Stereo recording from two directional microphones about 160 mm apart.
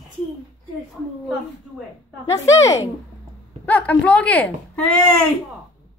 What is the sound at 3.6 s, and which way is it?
Speech, 10° left (ahead or behind).